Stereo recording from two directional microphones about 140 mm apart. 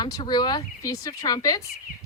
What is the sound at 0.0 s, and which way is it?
A woman's voice, 30° left (ahead or behind).